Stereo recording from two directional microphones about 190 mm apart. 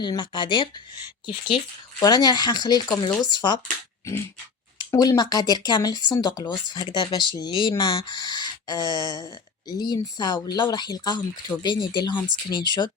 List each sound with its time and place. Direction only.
0.0 s speech: 25° left (ahead or behind)
2.0 s speech: 20° left (ahead or behind)
4.8 s speech: 20° left (ahead or behind)
8.8 s a sound: 20° right (ahead or behind)
9.1 s speech: 20° left (ahead or behind)